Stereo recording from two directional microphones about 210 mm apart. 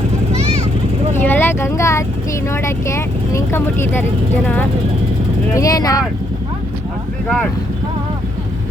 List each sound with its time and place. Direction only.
1.1 s vehicle: 10° left (ahead or behind)
2.5 s speech: 15° left (ahead or behind)
5.5 s speech: 15° left (ahead or behind)